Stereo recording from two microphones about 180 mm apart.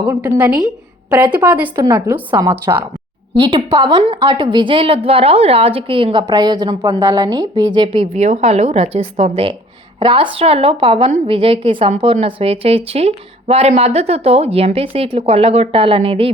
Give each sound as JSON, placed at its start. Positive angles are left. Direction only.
{"t": 0.1, "sound": "a woman's voice", "side_deg": -10}
{"t": 8.1, "sound": "a woman's voice", "side_deg": -40}